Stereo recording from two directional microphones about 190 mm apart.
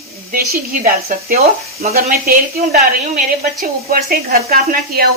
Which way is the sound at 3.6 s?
50° right (ahead or behind).